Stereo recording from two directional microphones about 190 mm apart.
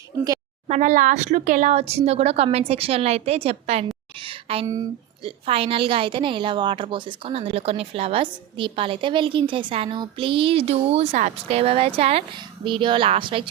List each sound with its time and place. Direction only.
0.7 s speech: 40° right (ahead or behind)
4.2 s a sound: 30° right (ahead or behind)
4.6 s speech: 20° right (ahead or behind)
5.5 s a woman's voice: 30° right (ahead or behind)